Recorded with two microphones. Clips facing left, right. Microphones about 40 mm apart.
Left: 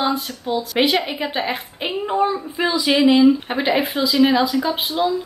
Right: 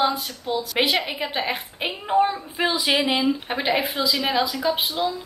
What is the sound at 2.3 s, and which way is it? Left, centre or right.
Speech, right.